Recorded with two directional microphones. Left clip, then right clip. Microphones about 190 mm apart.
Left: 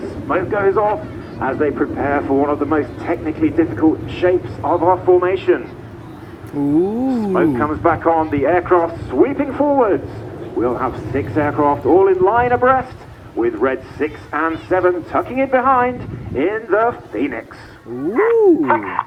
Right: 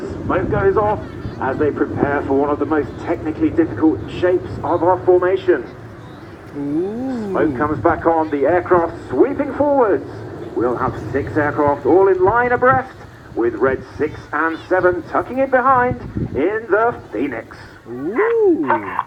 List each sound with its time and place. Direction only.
0.3 s speech: 45° right (ahead or behind)
4.6 s a man's voice: 25° right (ahead or behind)
7.3 s speech: 15° right (ahead or behind)
13.4 s a man's voice: 20° right (ahead or behind)
18.1 s owl: 5° left (ahead or behind)